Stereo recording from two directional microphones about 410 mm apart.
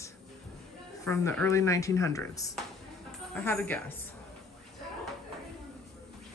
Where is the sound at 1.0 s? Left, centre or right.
Centre.